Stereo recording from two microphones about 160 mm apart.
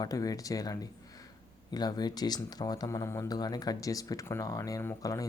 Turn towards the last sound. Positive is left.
turn(degrees=15)  # may be behind; listen again after turning